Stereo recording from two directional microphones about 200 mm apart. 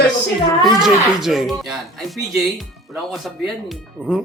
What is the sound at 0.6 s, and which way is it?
Speech, centre (ahead or behind).